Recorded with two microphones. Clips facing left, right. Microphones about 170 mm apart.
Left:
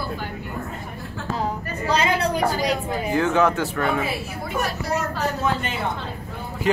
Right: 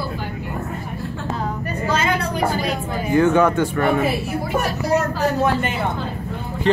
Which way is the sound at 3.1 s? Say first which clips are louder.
Right 5 dB; 5° left (ahead or behind).